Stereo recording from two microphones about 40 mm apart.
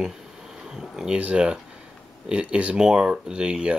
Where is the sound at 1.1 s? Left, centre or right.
Right.